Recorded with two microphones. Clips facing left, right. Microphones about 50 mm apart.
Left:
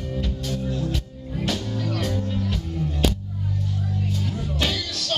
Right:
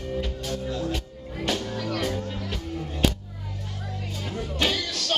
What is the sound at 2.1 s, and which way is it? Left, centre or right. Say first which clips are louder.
Music: left 4 dB; centre.